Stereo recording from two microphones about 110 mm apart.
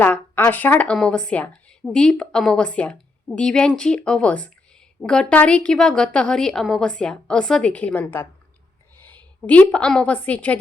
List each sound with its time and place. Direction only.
0.0 s a woman's voice: 20° left (ahead or behind)